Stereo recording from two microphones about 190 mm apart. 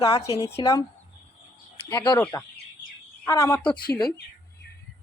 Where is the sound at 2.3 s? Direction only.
10° left (ahead or behind).